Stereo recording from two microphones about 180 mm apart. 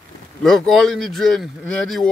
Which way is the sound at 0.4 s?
Centre (ahead or behind).